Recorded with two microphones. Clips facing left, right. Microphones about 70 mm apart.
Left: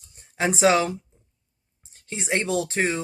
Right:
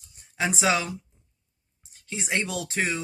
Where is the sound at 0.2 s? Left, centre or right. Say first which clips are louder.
Left 5 dB; left.